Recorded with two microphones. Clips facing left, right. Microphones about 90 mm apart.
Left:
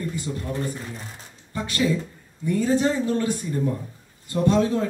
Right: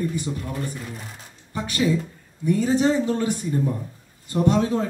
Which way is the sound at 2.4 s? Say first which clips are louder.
Right 1 dB; 20° right (ahead or behind).